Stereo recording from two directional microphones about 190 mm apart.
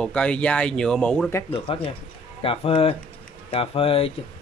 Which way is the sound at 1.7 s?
30° left (ahead or behind).